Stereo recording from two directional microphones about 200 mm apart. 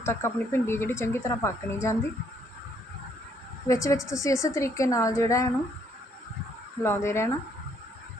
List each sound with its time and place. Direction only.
0.0 s speech: 10° left (ahead or behind)
3.7 s speech: 15° left (ahead or behind)
6.8 s speech: 10° left (ahead or behind)